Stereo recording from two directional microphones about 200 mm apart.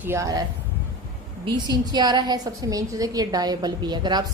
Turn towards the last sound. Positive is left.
turn(degrees=-20)  # may be behind; listen again after turning